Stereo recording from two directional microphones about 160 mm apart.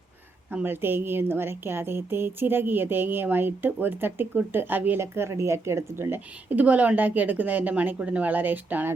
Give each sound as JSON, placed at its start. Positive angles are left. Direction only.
{"t": 0.5, "sound": "a woman's voice", "side_deg": -15}